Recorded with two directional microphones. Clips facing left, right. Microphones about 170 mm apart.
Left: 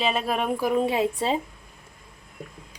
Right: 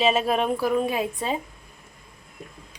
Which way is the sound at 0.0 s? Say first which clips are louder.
Right 4 dB; centre (ahead or behind).